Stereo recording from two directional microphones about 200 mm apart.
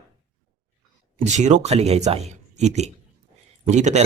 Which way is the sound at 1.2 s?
35° right (ahead or behind).